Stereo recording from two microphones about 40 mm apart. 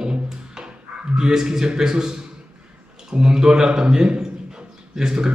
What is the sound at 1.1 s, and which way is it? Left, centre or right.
A man's voice, centre.